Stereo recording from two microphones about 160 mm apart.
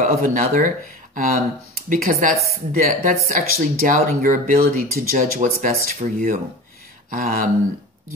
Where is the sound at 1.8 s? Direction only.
55° right (ahead or behind).